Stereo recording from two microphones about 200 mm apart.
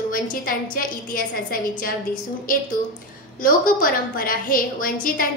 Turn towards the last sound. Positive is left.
turn(degrees=45)  # may be behind; listen again after turning